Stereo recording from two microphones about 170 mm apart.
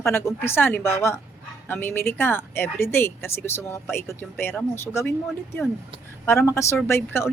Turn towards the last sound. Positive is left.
turn(degrees=15)  # may be behind; listen again after turning